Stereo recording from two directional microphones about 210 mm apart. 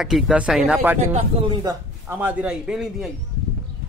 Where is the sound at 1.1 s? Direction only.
20° right (ahead or behind); by 3.1 s 5° right (ahead or behind).